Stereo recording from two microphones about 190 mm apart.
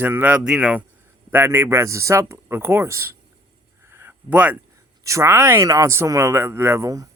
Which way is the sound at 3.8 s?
10° right (ahead or behind).